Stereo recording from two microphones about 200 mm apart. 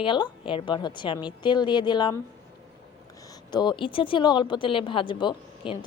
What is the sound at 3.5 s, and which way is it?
A woman's voice, 25° left (ahead or behind).